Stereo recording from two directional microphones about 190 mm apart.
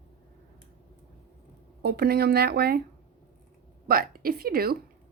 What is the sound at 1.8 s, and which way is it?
A woman's voice, 55° right (ahead or behind).